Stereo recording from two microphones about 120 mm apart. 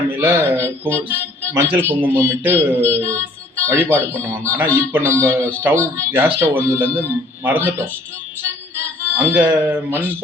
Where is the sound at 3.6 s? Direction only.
20° right (ahead or behind).